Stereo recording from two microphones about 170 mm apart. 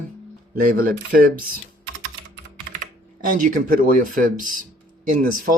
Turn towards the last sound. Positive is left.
turn(degrees=-55)  # may be behind; listen again after turning